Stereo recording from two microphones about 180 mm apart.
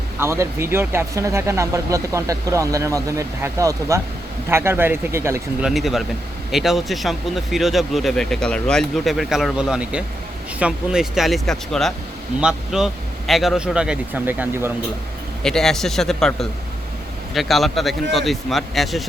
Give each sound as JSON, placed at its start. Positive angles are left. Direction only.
{"t": 0.2, "sound": "speech", "side_deg": -15}
{"t": 5.6, "sound": "speech", "side_deg": 0}
{"t": 15.4, "sound": "speech", "side_deg": 0}